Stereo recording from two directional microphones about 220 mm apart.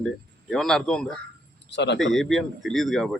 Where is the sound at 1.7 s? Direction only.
50° left (ahead or behind).